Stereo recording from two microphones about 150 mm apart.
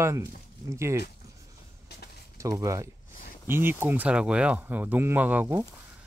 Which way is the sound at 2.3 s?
20° right (ahead or behind).